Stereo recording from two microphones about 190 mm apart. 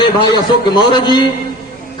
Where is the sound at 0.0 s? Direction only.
25° left (ahead or behind).